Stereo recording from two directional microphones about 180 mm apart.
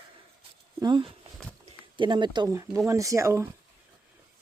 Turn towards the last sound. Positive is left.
turn(degrees=-15)  # may be behind; listen again after turning